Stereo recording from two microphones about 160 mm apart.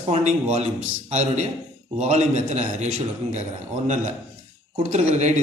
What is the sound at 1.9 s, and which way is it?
A man's voice, 45° right (ahead or behind).